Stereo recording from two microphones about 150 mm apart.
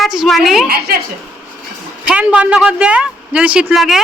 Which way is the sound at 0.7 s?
90° right.